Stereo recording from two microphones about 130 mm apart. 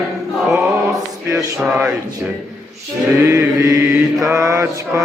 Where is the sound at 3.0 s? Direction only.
20° right (ahead or behind).